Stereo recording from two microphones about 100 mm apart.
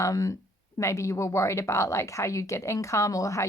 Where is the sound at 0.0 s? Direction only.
35° left (ahead or behind).